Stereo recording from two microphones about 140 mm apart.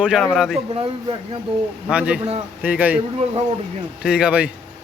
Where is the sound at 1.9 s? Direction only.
5° right (ahead or behind).